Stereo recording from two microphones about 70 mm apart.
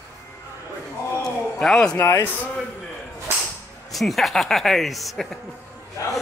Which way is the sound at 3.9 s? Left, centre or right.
Centre.